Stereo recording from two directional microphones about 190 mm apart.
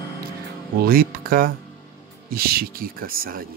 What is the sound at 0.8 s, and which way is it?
Speech, 50° right (ahead or behind).